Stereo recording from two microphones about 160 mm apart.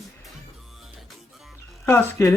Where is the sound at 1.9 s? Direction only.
15° left (ahead or behind).